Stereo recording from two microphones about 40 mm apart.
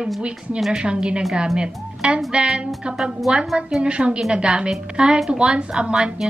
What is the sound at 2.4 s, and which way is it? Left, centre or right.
Speech, centre.